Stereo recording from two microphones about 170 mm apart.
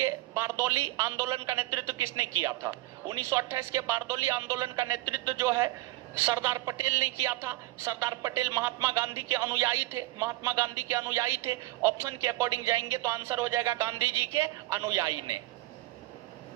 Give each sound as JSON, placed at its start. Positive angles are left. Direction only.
{"t": 0.0, "sound": "a man's voice", "side_deg": -15}